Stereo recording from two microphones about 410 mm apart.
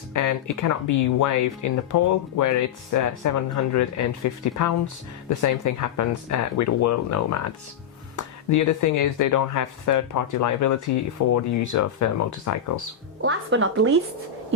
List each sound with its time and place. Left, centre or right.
0.1 s speech: left
13.2 s speech: right